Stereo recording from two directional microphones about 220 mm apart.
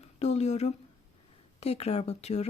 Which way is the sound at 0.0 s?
30° left (ahead or behind).